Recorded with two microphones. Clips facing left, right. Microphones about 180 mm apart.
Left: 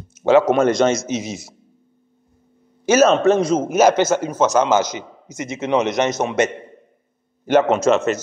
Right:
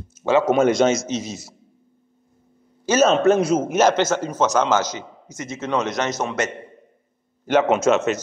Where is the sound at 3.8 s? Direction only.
10° left (ahead or behind).